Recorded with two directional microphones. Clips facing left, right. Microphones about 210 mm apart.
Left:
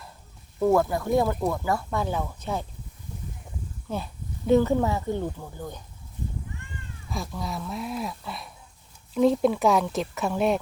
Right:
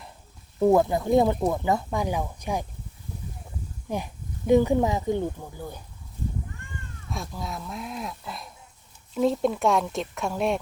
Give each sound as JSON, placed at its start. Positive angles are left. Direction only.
{"t": 0.6, "sound": "speech", "side_deg": -20}
{"t": 3.8, "sound": "speech", "side_deg": -15}
{"t": 7.1, "sound": "speech", "side_deg": 0}